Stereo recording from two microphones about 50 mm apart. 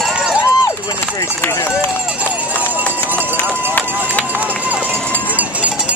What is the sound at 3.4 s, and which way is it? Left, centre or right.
Run, left.